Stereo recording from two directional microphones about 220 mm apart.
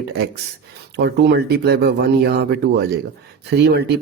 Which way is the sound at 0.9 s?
50° right (ahead or behind).